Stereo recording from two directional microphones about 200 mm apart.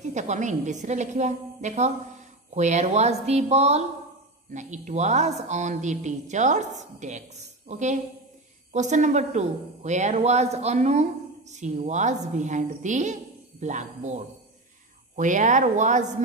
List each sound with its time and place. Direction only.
0.1 s a woman's voice: 35° right (ahead or behind)